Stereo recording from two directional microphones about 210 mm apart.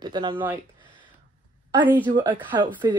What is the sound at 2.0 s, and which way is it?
Speech, 20° right (ahead or behind).